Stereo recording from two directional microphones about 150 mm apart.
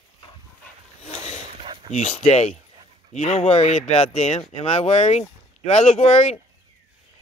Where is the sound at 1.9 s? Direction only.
50° left (ahead or behind).